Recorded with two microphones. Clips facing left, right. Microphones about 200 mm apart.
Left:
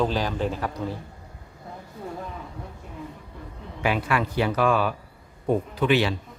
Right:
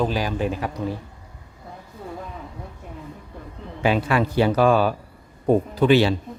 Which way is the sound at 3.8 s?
30° right (ahead or behind).